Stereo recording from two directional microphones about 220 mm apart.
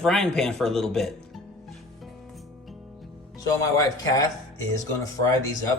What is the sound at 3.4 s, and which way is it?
Speech, 15° left (ahead or behind).